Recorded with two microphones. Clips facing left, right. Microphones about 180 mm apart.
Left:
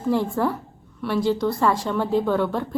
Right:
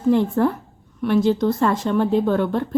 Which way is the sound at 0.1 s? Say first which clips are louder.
Right 4 dB; 20° right (ahead or behind).